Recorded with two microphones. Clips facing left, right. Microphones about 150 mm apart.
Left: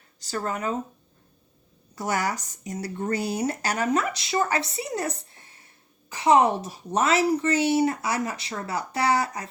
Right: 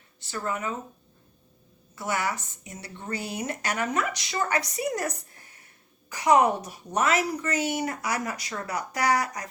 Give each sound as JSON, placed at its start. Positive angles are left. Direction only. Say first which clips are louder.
{"t": 0.2, "sound": "speech", "louder": "left 2 dB", "side_deg": 40}
{"t": 2.0, "sound": "a woman's voice", "louder": "left 2 dB", "side_deg": 40}